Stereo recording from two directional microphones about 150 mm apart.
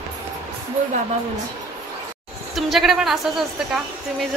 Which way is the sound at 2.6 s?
Centre (ahead or behind).